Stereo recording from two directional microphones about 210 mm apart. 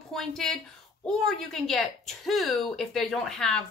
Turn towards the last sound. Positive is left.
turn(degrees=0)  # may be behind; listen again after turning